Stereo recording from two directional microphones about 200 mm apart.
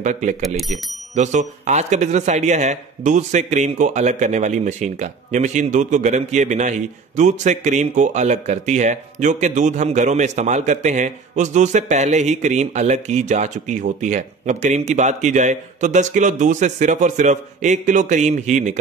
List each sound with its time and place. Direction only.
0.0 s speech: 35° right (ahead or behind)